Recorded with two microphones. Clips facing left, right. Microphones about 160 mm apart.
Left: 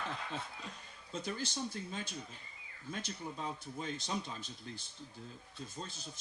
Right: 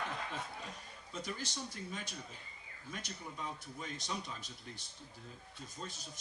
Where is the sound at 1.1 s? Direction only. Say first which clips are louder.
Left 3 dB; 30° left (ahead or behind).